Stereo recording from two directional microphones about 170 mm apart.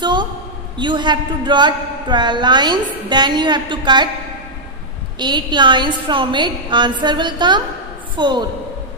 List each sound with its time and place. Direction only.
0.0 s a sound: 25° right (ahead or behind)
0.7 s speech: 25° right (ahead or behind)
5.2 s speech: 25° right (ahead or behind)